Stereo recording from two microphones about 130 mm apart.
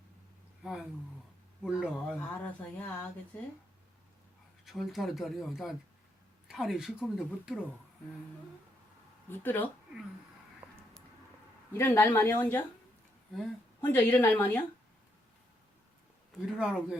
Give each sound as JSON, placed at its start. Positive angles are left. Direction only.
{"t": 0.6, "sound": "speech", "side_deg": -5}
{"t": 2.4, "sound": "a woman's voice", "side_deg": 10}
{"t": 4.6, "sound": "speech", "side_deg": 0}
{"t": 9.3, "sound": "a woman's voice", "side_deg": 15}
{"t": 10.6, "sound": "a sound", "side_deg": -15}
{"t": 11.7, "sound": "speech", "side_deg": 20}
{"t": 13.8, "sound": "a woman's voice", "side_deg": 15}
{"t": 16.5, "sound": "speech", "side_deg": 0}